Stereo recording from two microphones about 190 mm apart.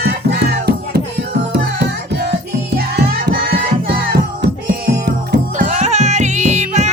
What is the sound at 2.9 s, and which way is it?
Music, 55° right (ahead or behind).